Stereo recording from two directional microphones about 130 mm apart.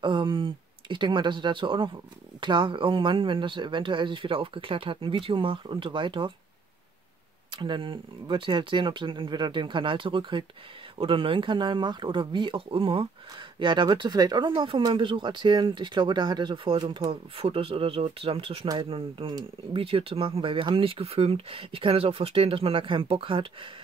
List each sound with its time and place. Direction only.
0.0 s speech: 40° right (ahead or behind)
7.5 s speech: 40° right (ahead or behind)
17.1 s speech: 45° right (ahead or behind)